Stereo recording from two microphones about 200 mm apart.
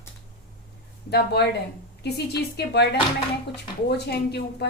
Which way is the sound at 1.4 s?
55° left (ahead or behind).